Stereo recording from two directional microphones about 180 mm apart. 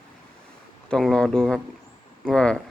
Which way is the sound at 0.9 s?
5° left (ahead or behind).